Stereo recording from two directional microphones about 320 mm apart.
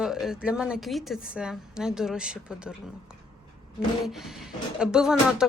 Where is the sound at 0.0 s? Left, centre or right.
Centre.